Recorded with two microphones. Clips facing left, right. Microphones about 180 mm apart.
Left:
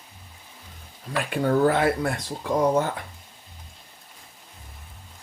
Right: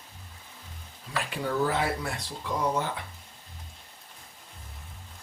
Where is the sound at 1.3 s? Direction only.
55° left (ahead or behind).